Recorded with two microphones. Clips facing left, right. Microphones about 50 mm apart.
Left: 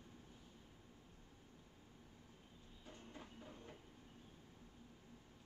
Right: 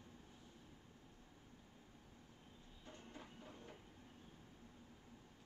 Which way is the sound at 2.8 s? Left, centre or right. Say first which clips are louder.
Even; centre.